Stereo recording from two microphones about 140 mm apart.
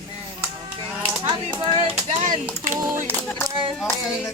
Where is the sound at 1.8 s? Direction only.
55° right (ahead or behind).